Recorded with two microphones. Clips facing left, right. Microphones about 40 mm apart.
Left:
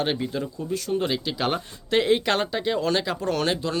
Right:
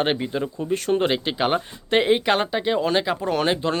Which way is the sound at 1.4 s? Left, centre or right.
Right.